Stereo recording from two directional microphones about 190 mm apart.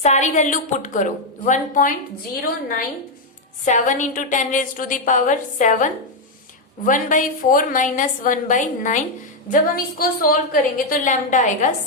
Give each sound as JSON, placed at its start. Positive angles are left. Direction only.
{"t": 0.0, "sound": "a woman's voice", "side_deg": 40}
{"t": 3.7, "sound": "a woman's voice", "side_deg": 40}